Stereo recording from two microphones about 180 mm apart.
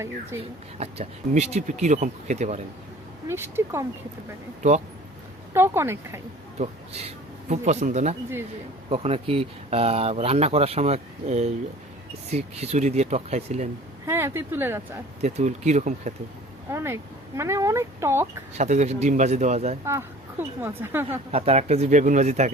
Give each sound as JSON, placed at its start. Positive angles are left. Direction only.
{"t": 0.8, "sound": "speech", "side_deg": -35}
{"t": 3.2, "sound": "speech", "side_deg": -15}
{"t": 5.5, "sound": "speech", "side_deg": -15}
{"t": 6.6, "sound": "speech", "side_deg": -35}
{"t": 14.1, "sound": "speech", "side_deg": -15}
{"t": 15.2, "sound": "speech", "side_deg": -40}
{"t": 16.6, "sound": "speech", "side_deg": -15}
{"t": 18.5, "sound": "speech", "side_deg": -40}
{"t": 19.8, "sound": "speech", "side_deg": -15}
{"t": 21.3, "sound": "speech", "side_deg": -35}